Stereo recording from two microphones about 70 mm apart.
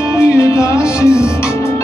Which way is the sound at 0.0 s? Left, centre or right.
Left.